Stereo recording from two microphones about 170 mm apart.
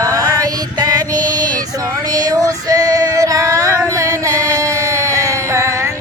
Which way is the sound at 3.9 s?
20° right (ahead or behind).